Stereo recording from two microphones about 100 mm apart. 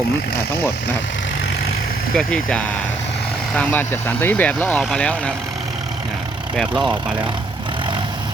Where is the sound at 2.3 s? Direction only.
10° left (ahead or behind).